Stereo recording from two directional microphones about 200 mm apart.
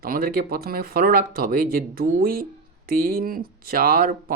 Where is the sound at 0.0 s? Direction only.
45° right (ahead or behind).